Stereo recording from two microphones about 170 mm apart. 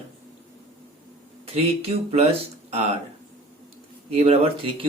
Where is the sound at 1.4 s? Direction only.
35° right (ahead or behind).